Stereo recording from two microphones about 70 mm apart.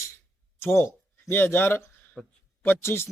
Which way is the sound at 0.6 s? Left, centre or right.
Left.